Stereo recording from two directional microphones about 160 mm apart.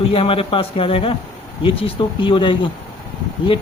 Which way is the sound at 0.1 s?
35° left (ahead or behind).